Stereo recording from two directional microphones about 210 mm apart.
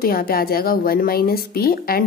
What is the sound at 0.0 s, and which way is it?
A woman's voice, 45° left (ahead or behind).